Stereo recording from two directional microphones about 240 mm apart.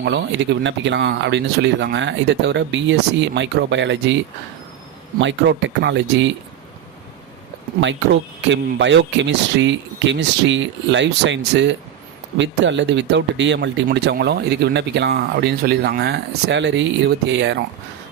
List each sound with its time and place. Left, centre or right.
0.0 s speech: right
5.2 s speech: right
8.4 s speech: right